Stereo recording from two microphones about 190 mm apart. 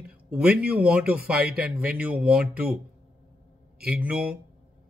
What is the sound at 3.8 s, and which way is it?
Speech, 5° right (ahead or behind).